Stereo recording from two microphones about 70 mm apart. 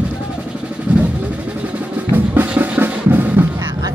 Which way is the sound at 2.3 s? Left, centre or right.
Right.